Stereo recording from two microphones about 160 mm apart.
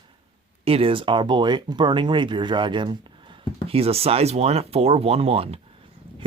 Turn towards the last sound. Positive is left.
turn(degrees=-35)  # may be behind; listen again after turning